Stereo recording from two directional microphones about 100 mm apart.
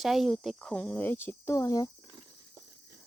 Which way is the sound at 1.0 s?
20° left (ahead or behind).